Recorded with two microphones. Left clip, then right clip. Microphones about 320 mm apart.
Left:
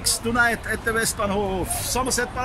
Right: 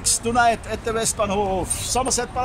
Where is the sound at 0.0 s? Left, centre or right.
Centre.